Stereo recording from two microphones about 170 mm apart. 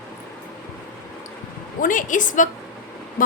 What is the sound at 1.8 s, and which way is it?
Speech, 50° left (ahead or behind).